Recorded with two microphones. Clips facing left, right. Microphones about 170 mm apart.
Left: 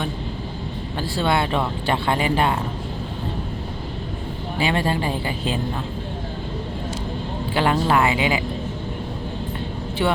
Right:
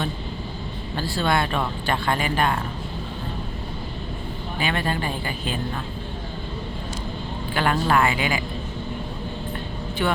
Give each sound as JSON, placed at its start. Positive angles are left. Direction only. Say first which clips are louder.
{"t": 1.2, "sound": "speech", "louder": "left 2 dB", "side_deg": 20}
{"t": 4.6, "sound": "speech", "louder": "left 4 dB", "side_deg": 30}
{"t": 7.5, "sound": "speech", "louder": "left 2 dB", "side_deg": 25}
{"t": 10.0, "sound": "speech", "louder": "left 3 dB", "side_deg": 25}